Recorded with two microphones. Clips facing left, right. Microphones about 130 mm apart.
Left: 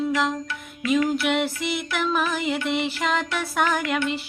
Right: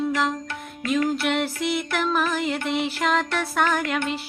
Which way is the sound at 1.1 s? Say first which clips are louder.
Left 1 dB; centre (ahead or behind).